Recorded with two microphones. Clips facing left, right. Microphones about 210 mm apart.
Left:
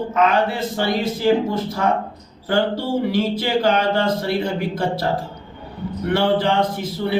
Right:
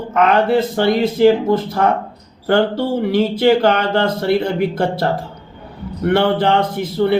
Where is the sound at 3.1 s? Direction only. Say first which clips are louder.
Right 6 dB; 60° right (ahead or behind).